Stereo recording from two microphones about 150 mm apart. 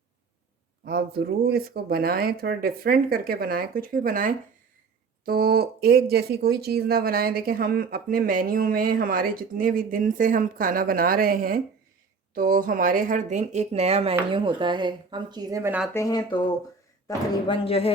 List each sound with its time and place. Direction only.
0.9 s speech: 90° right; by 4.4 s 70° right (ahead or behind)
5.2 s speech: 90° right; by 15.7 s 25° right (ahead or behind)
15.9 s speech: 20° left (ahead or behind)
17.4 s speech: 35° left (ahead or behind)